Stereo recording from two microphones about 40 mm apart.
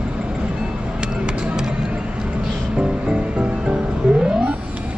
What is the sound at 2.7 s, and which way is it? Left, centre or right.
Music, right.